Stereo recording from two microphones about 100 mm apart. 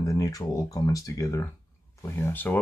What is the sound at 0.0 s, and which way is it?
Speech, 35° left (ahead or behind).